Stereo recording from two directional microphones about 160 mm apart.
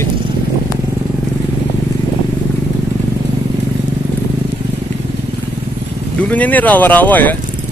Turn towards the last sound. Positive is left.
turn(degrees=10)  # may be behind; listen again after turning